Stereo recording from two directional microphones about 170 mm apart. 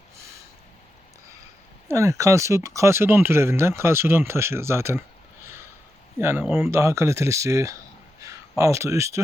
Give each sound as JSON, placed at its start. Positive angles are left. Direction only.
{"t": 1.9, "sound": "speech", "side_deg": -20}
{"t": 6.1, "sound": "speech", "side_deg": -15}